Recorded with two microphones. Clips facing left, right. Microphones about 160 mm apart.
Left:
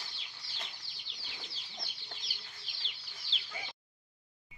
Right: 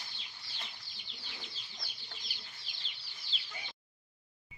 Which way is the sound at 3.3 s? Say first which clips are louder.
Even; 90° left.